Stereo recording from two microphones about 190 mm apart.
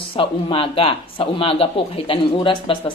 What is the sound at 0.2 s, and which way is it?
A woman's voice, 30° left (ahead or behind).